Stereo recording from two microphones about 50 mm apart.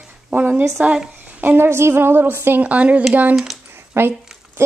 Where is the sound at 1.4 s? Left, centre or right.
Right.